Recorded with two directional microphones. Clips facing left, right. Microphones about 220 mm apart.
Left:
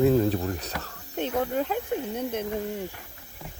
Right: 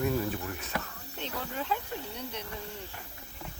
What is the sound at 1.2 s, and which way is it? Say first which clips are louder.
Snake: left 11 dB; 50° left (ahead or behind).